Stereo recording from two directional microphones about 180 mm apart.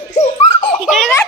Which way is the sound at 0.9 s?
Centre (ahead or behind).